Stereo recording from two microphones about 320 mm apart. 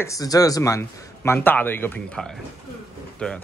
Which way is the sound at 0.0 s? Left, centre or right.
Centre.